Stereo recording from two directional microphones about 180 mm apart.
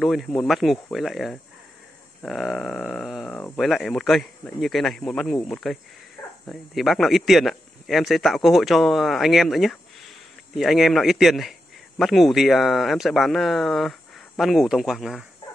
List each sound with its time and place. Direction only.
0.0 s speech: centre (ahead or behind)